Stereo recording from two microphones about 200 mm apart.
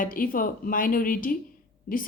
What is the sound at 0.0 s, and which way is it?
A woman's voice, 45° left (ahead or behind).